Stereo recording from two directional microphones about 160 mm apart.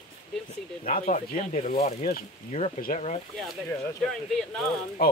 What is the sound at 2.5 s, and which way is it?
Speech, 45° left (ahead or behind).